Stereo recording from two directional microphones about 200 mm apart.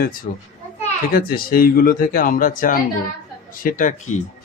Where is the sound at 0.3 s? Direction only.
40° left (ahead or behind).